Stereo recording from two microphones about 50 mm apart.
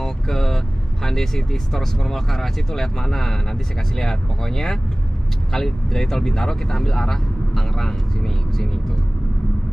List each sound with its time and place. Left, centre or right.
0.0 s vehicle: centre
1.0 s speech: centre